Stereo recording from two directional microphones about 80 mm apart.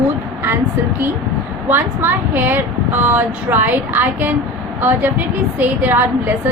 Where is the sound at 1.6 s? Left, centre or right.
Right.